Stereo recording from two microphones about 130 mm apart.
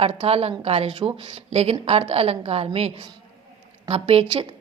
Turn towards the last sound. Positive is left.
turn(degrees=-50)  # may be behind; listen again after turning